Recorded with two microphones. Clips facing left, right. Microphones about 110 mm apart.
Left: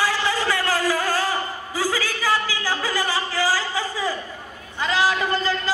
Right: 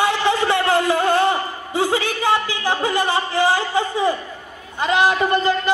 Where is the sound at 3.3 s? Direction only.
25° right (ahead or behind).